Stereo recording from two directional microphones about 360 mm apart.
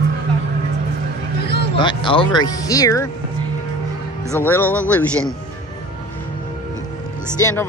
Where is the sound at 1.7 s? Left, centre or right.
Centre.